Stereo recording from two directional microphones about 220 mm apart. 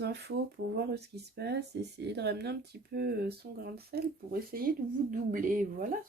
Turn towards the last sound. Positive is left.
turn(degrees=-40)  # may be behind; listen again after turning